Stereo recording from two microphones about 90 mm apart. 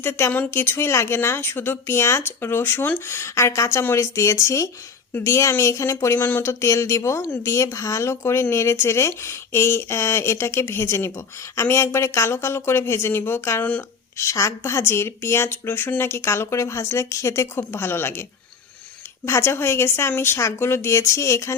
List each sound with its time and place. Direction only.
0.0 s speech: 25° left (ahead or behind)
13.6 s speech: 15° left (ahead or behind)
14.2 s speech: 35° left (ahead or behind)
19.2 s speech: 30° left (ahead or behind)